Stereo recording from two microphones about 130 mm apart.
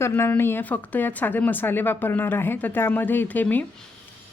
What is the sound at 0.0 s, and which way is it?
A woman's voice, 15° left (ahead or behind).